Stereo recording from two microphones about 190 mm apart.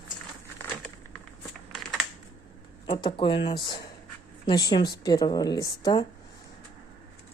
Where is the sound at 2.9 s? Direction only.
25° left (ahead or behind).